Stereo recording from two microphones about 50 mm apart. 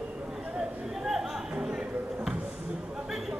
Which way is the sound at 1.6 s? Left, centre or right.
Centre.